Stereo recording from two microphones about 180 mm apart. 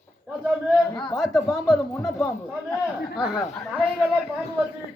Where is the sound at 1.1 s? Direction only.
Centre (ahead or behind).